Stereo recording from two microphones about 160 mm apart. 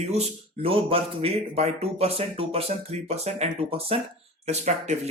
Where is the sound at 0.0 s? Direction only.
40° right (ahead or behind).